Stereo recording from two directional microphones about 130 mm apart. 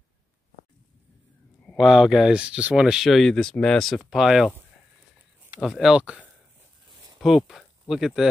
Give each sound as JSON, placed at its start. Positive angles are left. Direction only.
{"t": 1.7, "sound": "speech", "side_deg": 0}
{"t": 5.6, "sound": "speech", "side_deg": 0}